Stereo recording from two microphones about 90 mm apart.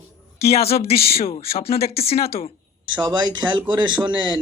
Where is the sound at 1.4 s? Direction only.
90° left.